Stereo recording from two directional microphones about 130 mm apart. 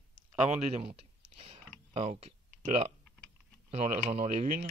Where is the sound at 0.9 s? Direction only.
45° right (ahead or behind).